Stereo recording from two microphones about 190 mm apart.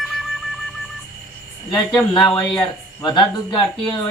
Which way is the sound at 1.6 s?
25° left (ahead or behind).